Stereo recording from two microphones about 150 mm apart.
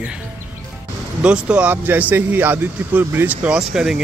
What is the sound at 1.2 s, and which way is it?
Speech, 5° right (ahead or behind).